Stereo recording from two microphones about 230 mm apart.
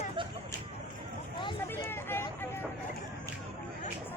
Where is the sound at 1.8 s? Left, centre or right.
Centre.